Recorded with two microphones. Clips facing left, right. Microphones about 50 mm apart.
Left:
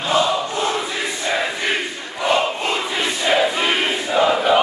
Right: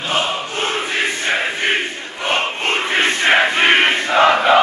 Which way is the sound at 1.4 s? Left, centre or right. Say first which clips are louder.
Right 3 dB; right.